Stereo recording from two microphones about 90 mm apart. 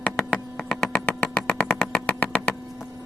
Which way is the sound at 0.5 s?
5° left (ahead or behind).